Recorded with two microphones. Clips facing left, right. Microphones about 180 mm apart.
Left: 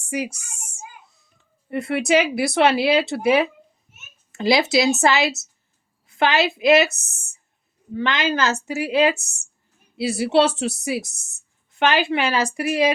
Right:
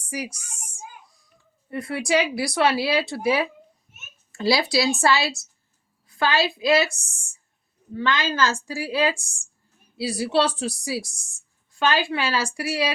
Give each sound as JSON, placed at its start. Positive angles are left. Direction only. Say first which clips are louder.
{"t": 0.1, "sound": "a woman's voice", "louder": "left 5 dB", "side_deg": 25}
{"t": 0.5, "sound": "child singing", "louder": "left 1 dB", "side_deg": 25}
{"t": 1.7, "sound": "a woman's voice", "louder": "left 4 dB", "side_deg": 25}
{"t": 4.3, "sound": "a sound", "louder": "left 3 dB", "side_deg": 20}
{"t": 4.7, "sound": "a woman's voice", "louder": "left 3 dB", "side_deg": 20}